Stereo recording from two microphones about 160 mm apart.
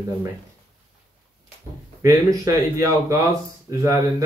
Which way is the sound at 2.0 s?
20° right (ahead or behind).